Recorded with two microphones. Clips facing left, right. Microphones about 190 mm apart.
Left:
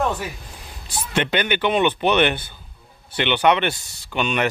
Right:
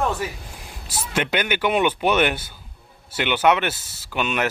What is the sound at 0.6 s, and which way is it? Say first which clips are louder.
A man's voice: left 1 dB; 5° right (ahead or behind).